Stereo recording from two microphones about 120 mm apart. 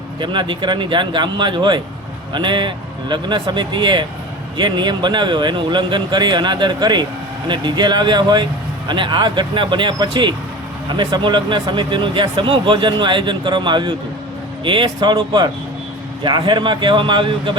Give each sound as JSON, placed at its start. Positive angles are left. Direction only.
{"t": 0.2, "sound": "a man's voice", "side_deg": -40}